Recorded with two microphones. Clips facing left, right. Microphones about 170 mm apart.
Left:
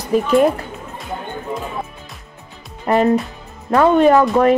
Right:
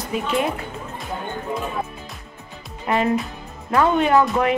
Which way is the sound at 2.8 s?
40° left (ahead or behind).